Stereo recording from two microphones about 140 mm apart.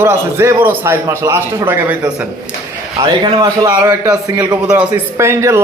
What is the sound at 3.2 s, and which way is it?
A man's voice, 30° right (ahead or behind).